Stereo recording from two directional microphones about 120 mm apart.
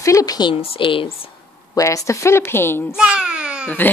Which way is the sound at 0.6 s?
45° left (ahead or behind).